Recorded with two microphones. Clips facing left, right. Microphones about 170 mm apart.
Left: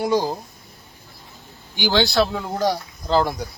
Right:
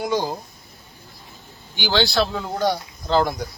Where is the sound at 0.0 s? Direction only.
35° left (ahead or behind).